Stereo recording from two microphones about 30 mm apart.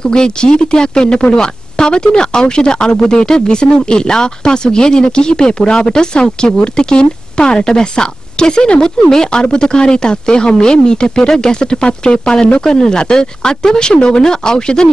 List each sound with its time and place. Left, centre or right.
0.0 s speech: left